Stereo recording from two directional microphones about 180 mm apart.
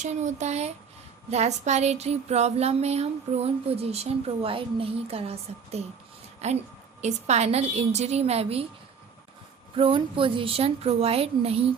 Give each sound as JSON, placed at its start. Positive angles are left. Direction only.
{"t": 0.0, "sound": "speech", "side_deg": -40}
{"t": 9.7, "sound": "speech", "side_deg": -30}